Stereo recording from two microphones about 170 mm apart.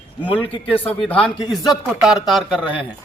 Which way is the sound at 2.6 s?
30° left (ahead or behind).